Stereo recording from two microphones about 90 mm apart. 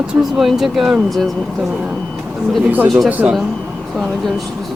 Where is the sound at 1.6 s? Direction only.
10° right (ahead or behind).